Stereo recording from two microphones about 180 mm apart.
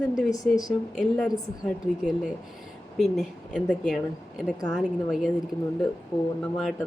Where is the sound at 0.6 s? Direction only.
Centre (ahead or behind).